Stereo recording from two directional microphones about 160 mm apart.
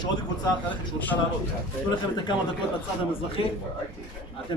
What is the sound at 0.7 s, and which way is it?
Speech, 10° left (ahead or behind).